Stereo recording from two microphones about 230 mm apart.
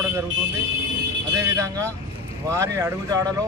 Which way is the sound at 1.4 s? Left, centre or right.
Centre.